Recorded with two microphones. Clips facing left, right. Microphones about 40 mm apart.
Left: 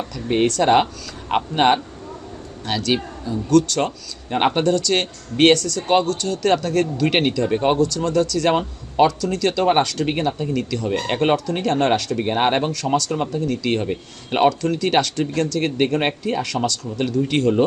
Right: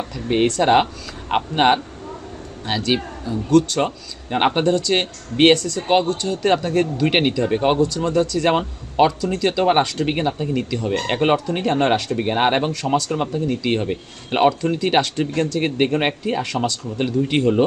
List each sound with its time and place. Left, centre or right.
0.6 s speech: centre
7.8 s speech: right
10.1 s speech: centre
12.1 s speech: centre
13.0 s speech: right
13.2 s speech: centre